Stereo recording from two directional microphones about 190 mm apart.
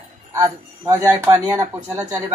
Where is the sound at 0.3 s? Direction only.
15° right (ahead or behind).